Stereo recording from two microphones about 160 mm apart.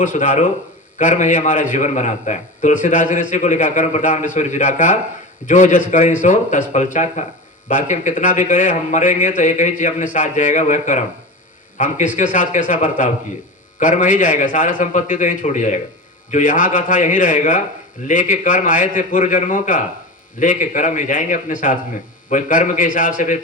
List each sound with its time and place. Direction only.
0.0 s a man's voice: 50° left (ahead or behind)